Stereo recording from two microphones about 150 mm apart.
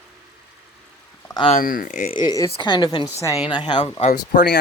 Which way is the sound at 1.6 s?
65° left (ahead or behind).